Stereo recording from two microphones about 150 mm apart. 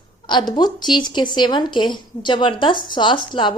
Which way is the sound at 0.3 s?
30° left (ahead or behind).